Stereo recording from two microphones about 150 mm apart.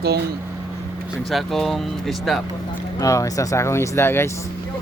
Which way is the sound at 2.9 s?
20° left (ahead or behind).